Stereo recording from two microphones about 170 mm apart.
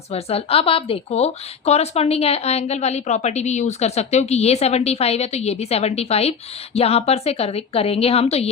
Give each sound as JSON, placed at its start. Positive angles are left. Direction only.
{"t": 0.1, "sound": "a woman's voice", "side_deg": 35}